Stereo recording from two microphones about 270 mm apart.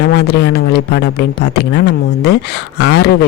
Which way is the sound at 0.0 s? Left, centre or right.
Left.